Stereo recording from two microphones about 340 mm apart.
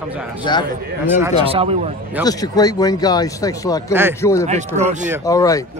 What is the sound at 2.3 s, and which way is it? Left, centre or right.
Speech, centre.